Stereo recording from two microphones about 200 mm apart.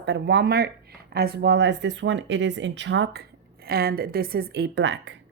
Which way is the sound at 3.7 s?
50° right (ahead or behind).